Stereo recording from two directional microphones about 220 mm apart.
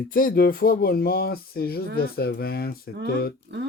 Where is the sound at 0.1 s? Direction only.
40° left (ahead or behind).